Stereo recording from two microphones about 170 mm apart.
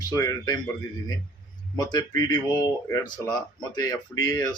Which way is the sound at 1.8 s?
25° left (ahead or behind).